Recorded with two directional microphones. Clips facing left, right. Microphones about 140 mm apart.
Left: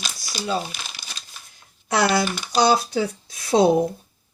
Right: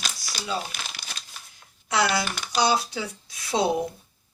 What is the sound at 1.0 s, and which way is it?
Crumpling, 15° right (ahead or behind).